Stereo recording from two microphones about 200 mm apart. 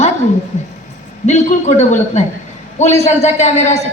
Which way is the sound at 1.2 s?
35° left (ahead or behind).